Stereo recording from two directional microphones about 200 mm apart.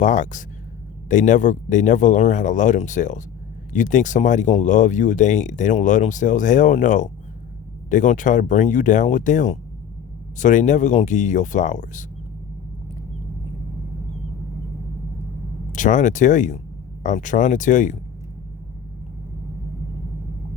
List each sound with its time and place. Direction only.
0.0 s speech: 40° left (ahead or behind)
15.7 s speech: 40° left (ahead or behind)